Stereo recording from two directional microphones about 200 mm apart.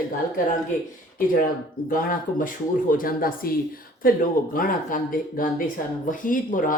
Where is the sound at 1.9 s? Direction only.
45° left (ahead or behind).